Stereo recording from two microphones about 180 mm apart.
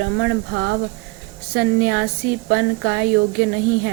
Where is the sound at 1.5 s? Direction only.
70° right (ahead or behind).